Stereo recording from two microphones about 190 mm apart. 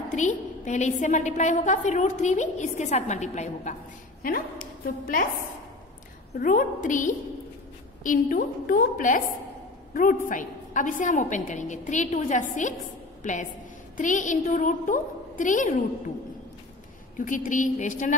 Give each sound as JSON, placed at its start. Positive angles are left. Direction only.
{"t": 0.1, "sound": "a woman's voice", "side_deg": 40}
{"t": 4.2, "sound": "a woman's voice", "side_deg": 50}
{"t": 6.3, "sound": "a woman's voice", "side_deg": 45}
{"t": 17.2, "sound": "a woman's voice", "side_deg": 45}